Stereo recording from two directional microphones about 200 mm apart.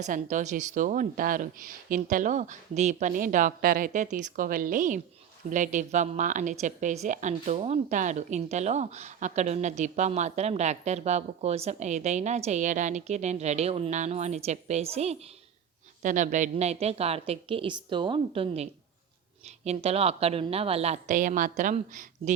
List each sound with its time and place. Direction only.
0.0 s a woman's voice: 40° right (ahead or behind)